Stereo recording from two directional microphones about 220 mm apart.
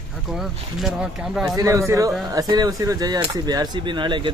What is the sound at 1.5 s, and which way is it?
Speech, 15° right (ahead or behind).